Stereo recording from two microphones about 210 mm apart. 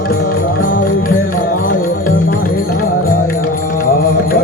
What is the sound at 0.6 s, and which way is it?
Music, 45° left (ahead or behind).